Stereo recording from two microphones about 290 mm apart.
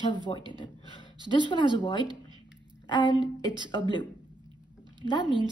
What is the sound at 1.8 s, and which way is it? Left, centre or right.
Speech, centre.